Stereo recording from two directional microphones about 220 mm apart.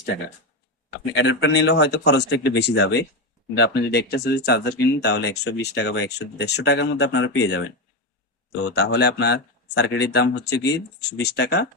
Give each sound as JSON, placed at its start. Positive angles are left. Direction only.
{"t": 1.1, "sound": "speech", "side_deg": 55}
{"t": 8.7, "sound": "speech", "side_deg": 50}